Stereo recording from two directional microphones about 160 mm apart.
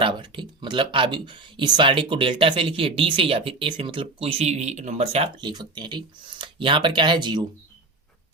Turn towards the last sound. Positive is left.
turn(degrees=-30)  # may be behind; listen again after turning